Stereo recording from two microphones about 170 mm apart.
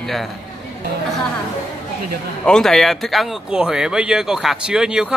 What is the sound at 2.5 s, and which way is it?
Speech, 5° left (ahead or behind).